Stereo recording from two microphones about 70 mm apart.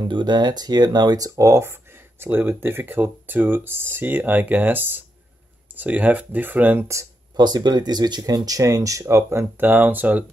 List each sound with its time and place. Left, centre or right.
0.0 s speech: right
7.3 s speech: right
9.7 s speech: right